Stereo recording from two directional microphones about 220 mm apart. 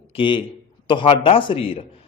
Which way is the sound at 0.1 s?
20° left (ahead or behind).